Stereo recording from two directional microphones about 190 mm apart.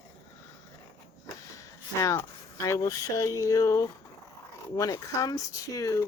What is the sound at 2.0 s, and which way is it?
Speech, 15° left (ahead or behind).